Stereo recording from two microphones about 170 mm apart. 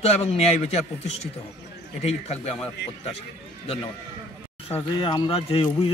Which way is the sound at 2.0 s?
40° left (ahead or behind).